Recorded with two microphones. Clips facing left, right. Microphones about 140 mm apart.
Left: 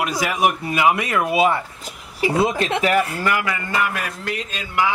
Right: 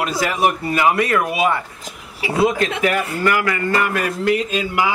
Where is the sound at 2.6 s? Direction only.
25° left (ahead or behind).